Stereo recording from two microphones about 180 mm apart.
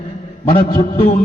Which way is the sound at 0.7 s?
50° left (ahead or behind).